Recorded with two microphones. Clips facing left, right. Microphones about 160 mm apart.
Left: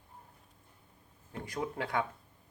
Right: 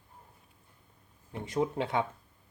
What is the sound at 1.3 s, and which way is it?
Speech, 20° right (ahead or behind).